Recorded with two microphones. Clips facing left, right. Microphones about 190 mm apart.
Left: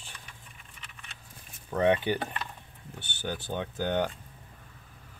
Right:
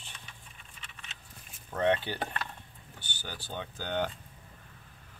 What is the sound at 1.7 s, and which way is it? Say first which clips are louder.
Speech: left 4 dB; 15° left (ahead or behind).